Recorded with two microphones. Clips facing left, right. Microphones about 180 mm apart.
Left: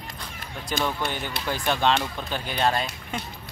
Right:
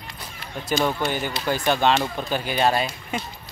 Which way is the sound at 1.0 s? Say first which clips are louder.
Right 4 dB; 5° right (ahead or behind).